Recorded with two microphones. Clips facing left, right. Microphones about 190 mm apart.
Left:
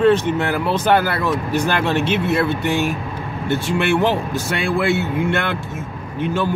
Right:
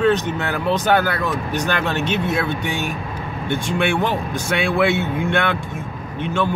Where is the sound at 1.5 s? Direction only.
5° left (ahead or behind).